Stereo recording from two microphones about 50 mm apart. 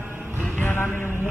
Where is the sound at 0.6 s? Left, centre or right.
Left.